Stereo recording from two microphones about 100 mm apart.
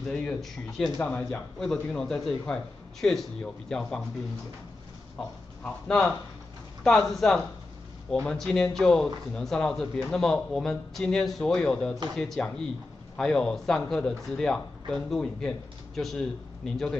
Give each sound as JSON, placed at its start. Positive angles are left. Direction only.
{"t": 0.0, "sound": "speech", "side_deg": 5}
{"t": 1.0, "sound": "a man's voice", "side_deg": 15}
{"t": 5.6, "sound": "a man's voice", "side_deg": 5}